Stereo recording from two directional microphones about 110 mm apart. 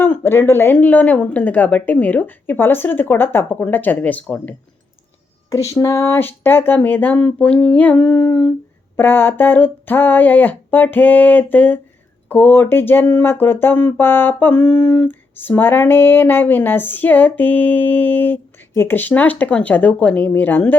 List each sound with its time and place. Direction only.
0.0 s speech: 20° left (ahead or behind)
5.5 s speech: 30° left (ahead or behind); by 8.5 s 5° left (ahead or behind)
9.0 s speech: 20° left (ahead or behind)